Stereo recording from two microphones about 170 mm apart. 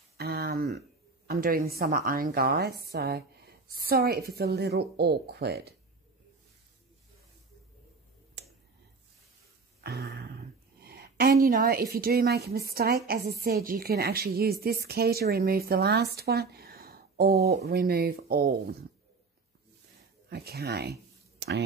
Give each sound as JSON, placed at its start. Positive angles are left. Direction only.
{"t": 0.2, "sound": "a sound", "side_deg": -70}
{"t": 1.2, "sound": "a woman's voice", "side_deg": -55}
{"t": 8.4, "sound": "finger snapping", "side_deg": -80}
{"t": 9.8, "sound": "a sound", "side_deg": -75}
{"t": 11.4, "sound": "a woman's voice", "side_deg": -60}
{"t": 20.2, "sound": "speech", "side_deg": -65}